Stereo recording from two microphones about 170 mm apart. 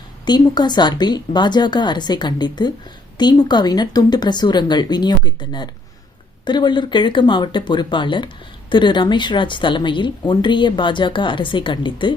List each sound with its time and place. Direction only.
0.3 s speech: 25° left (ahead or behind)